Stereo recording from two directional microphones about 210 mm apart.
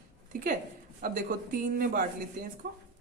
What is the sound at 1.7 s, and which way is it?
A woman's voice, 45° right (ahead or behind).